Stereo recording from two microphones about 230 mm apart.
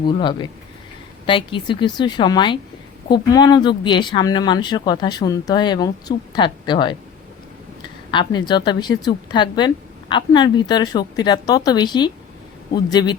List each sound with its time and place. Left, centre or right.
0.1 s speech: centre
8.1 s a man's voice: centre